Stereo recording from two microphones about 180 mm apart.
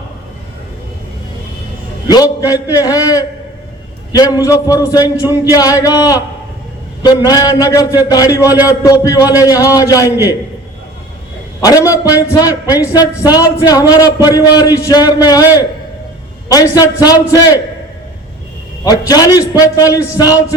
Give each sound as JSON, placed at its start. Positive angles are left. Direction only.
{"t": 2.4, "sound": "speech", "side_deg": 20}
{"t": 11.6, "sound": "speech", "side_deg": 20}
{"t": 16.5, "sound": "speech", "side_deg": 20}
{"t": 18.9, "sound": "speech", "side_deg": 20}